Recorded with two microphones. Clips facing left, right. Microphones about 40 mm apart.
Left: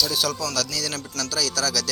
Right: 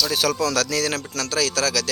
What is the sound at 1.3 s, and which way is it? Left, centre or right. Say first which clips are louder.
Speech: right 3 dB; right.